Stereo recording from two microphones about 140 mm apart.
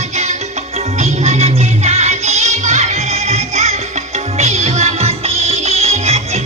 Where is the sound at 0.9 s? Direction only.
50° right (ahead or behind).